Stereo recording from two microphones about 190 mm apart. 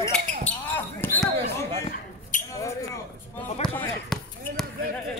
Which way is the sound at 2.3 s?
45° left (ahead or behind).